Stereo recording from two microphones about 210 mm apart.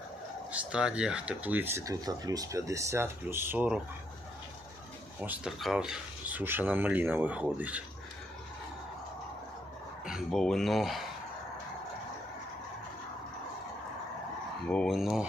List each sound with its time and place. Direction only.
0.5 s speech: 5° right (ahead or behind)
5.2 s speech: 5° right (ahead or behind)
10.1 s speech: centre (ahead or behind)
14.7 s speech: centre (ahead or behind)